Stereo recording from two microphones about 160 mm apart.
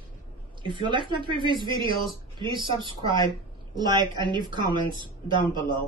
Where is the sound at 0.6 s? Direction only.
30° right (ahead or behind).